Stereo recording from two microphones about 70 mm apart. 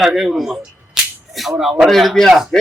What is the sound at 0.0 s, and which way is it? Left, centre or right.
Speech, centre.